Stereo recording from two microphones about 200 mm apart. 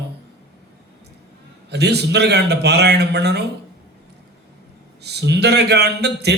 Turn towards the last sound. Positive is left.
turn(degrees=-55)  # may be behind; listen again after turning